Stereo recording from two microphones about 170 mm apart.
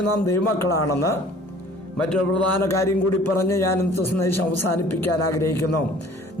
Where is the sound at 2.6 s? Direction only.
15° left (ahead or behind).